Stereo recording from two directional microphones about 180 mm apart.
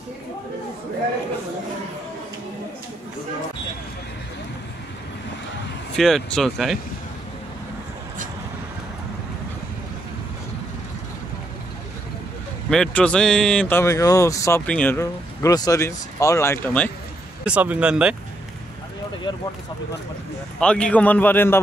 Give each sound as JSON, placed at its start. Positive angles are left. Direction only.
{"t": 5.9, "sound": "speech", "side_deg": 0}
{"t": 12.6, "sound": "speech", "side_deg": 5}
{"t": 17.5, "sound": "speech", "side_deg": -5}
{"t": 19.3, "sound": "speech", "side_deg": 25}
{"t": 20.5, "sound": "speech", "side_deg": 5}